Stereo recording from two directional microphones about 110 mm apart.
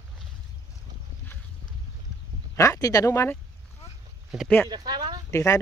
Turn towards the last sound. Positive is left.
turn(degrees=25)  # may be behind; listen again after turning